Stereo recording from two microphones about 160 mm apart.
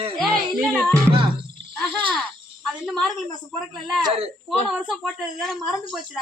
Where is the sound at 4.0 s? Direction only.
35° right (ahead or behind).